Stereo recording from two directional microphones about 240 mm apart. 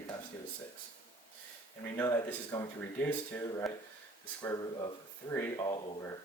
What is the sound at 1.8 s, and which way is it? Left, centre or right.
Speech, centre.